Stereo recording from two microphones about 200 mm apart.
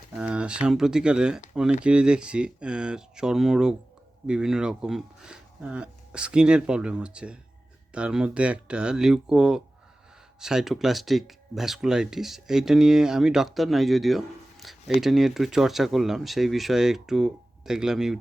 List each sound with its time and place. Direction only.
0.2 s speech: 5° right (ahead or behind)